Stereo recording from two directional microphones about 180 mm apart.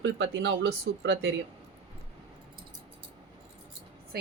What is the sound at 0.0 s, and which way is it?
Speech, 90° right.